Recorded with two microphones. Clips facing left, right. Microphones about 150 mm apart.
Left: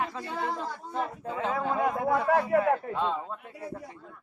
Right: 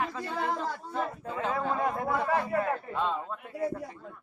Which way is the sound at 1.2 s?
25° left (ahead or behind).